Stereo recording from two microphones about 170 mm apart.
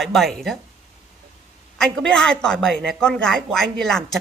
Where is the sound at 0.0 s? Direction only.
Centre (ahead or behind).